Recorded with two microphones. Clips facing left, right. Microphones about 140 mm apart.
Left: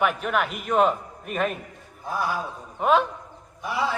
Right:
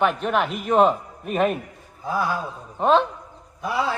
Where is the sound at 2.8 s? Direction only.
25° right (ahead or behind).